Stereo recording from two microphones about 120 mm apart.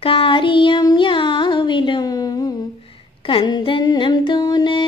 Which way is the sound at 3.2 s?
45° left (ahead or behind).